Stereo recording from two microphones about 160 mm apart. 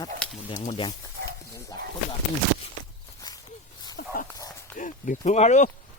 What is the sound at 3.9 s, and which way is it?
Dog, 65° left (ahead or behind).